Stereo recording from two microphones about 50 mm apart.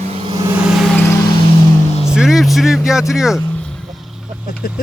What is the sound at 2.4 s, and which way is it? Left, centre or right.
Speech, centre.